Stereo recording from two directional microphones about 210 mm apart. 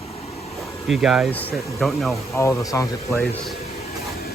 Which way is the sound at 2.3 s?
15° left (ahead or behind).